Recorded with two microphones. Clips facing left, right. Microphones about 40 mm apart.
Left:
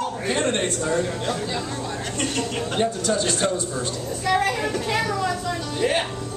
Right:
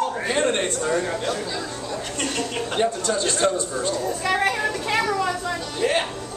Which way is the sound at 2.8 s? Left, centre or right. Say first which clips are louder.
Even; centre.